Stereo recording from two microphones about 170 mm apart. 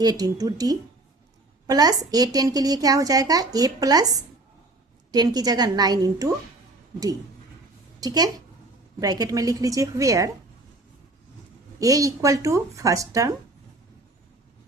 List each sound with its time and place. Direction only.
0.0 s a woman's voice: 20° right (ahead or behind)
8.0 s a woman's voice: 20° right (ahead or behind)
11.8 s a woman's voice: 20° right (ahead or behind)